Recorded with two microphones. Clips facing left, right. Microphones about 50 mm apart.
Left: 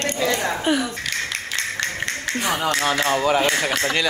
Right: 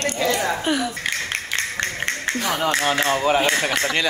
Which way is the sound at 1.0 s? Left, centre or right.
Right.